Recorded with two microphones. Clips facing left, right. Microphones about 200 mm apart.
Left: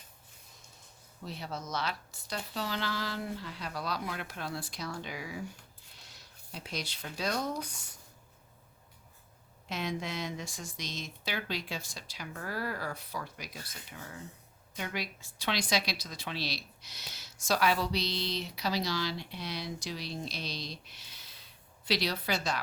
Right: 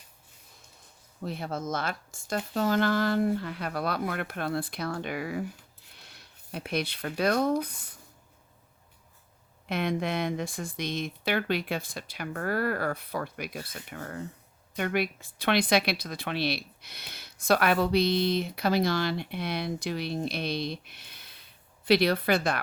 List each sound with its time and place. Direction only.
1.2 s speech: 55° right (ahead or behind)
9.6 s speech: 60° right (ahead or behind)